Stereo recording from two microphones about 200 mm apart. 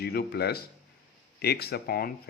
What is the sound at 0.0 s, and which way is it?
Speech, 50° left (ahead or behind).